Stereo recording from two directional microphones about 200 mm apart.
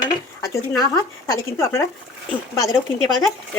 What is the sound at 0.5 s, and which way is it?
Speech, 15° left (ahead or behind).